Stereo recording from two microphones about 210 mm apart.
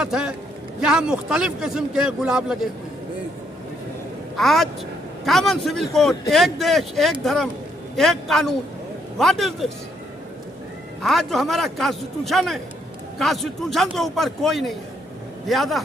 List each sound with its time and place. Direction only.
0.0 s speech: 5° right (ahead or behind)
4.4 s speech: centre (ahead or behind)
11.0 s speech: centre (ahead or behind)